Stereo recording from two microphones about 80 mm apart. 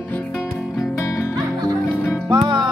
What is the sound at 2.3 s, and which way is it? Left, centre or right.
Music, right.